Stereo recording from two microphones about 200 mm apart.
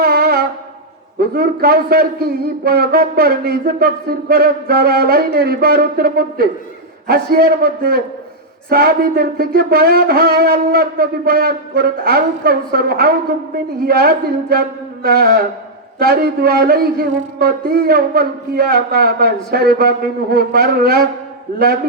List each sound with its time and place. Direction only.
0.0 s wind instrument: 50° right (ahead or behind)
1.2 s a man's voice: 50° right (ahead or behind)